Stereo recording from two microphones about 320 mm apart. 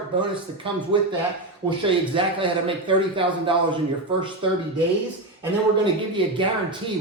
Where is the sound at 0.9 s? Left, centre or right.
Centre.